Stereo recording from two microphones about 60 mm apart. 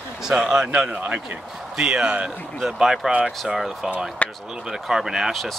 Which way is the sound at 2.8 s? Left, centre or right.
Centre.